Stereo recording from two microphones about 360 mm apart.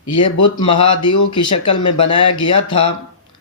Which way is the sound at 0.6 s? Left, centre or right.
Centre.